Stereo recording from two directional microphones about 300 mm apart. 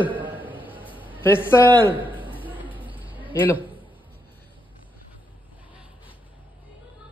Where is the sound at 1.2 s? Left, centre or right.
Centre.